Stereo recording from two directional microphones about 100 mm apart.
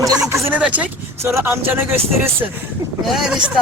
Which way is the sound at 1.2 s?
25° right (ahead or behind).